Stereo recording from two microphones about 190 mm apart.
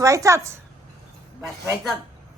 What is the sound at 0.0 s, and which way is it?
Speech, 15° right (ahead or behind).